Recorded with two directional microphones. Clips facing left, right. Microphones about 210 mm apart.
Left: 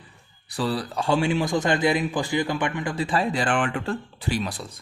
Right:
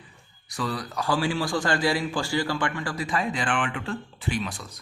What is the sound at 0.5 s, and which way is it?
A man's voice, 30° left (ahead or behind).